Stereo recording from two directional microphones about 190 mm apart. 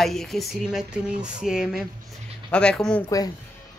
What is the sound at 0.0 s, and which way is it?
Speech, centre (ahead or behind).